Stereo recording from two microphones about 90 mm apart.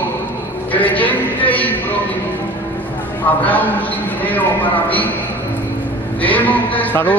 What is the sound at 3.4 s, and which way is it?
A man's voice, 20° left (ahead or behind).